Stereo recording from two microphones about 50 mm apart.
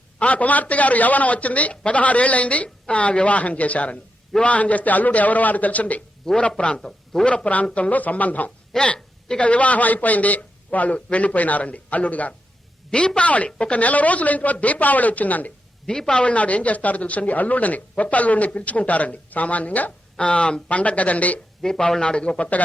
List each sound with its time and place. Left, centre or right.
0.2 s speech: left
6.3 s a man's voice: centre
7.3 s speech: left
8.4 s speech: centre; by 15.5 s left
15.9 s a man's voice: centre
16.2 s speech: left
21.6 s speech: centre